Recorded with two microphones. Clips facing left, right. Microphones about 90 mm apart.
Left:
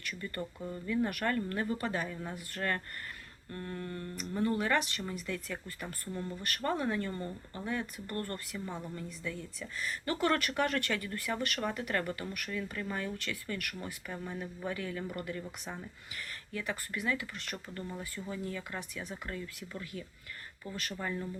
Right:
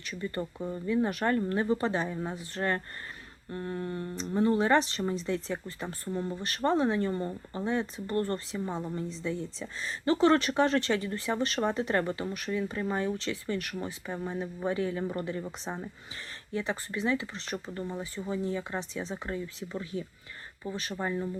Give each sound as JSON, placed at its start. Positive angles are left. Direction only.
{"t": 0.0, "sound": "speech", "side_deg": -20}